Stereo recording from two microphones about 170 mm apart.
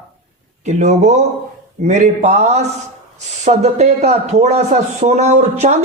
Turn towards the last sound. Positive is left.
turn(degrees=-40)  # may be behind; listen again after turning